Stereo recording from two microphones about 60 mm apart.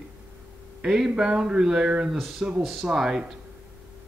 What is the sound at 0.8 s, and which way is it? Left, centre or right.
Speech, centre.